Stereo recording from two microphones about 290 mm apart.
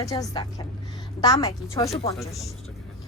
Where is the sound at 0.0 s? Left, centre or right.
Centre.